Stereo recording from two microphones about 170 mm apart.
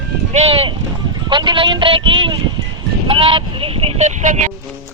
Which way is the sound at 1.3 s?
30° right (ahead or behind).